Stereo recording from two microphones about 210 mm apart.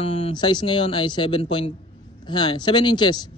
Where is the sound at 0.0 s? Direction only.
25° left (ahead or behind).